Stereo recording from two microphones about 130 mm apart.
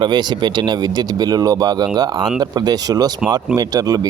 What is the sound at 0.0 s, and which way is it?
Speech, 35° right (ahead or behind).